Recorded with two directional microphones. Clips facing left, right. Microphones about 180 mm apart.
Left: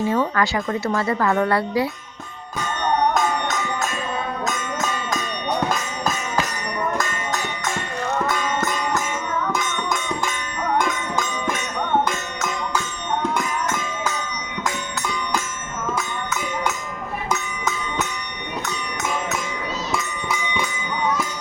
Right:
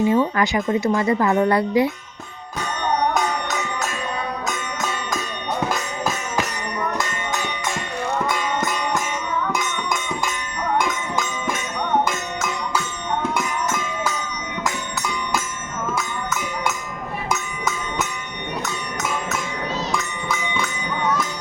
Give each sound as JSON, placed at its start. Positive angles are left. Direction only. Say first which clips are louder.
{"t": 0.1, "sound": "speech", "louder": "right 2 dB", "side_deg": -15}
{"t": 9.5, "sound": "music", "louder": "even", "side_deg": -10}
{"t": 16.0, "sound": "music", "louder": "even", "side_deg": -5}
{"t": 17.2, "sound": "a sound", "louder": "even", "side_deg": -10}
{"t": 19.9, "sound": "music", "louder": "even", "side_deg": 5}